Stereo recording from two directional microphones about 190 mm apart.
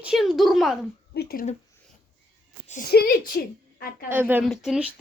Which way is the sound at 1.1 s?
55° left (ahead or behind).